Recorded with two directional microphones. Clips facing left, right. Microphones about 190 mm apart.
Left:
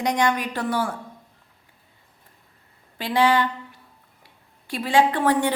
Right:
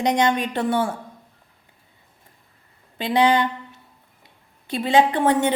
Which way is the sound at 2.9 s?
20° right (ahead or behind).